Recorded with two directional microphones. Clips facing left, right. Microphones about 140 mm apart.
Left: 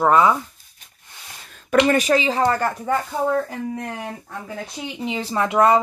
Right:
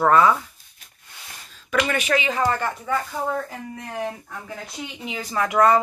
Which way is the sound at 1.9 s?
35° left (ahead or behind).